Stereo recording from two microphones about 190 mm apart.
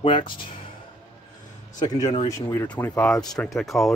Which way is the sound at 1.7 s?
20° left (ahead or behind).